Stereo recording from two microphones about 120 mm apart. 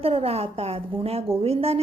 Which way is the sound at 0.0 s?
55° right (ahead or behind).